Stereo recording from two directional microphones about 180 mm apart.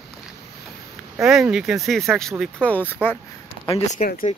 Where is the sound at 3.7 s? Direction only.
35° left (ahead or behind).